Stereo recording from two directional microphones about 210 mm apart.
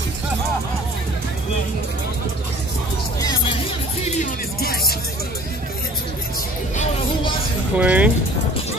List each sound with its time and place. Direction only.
3.2 s music: 20° left (ahead or behind)
4.0 s music: 30° left (ahead or behind)
4.6 s music: 45° left (ahead or behind)
7.7 s speech: 5° right (ahead or behind)